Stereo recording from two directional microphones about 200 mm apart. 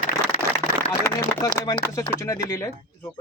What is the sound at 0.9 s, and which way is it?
Speech, 20° left (ahead or behind).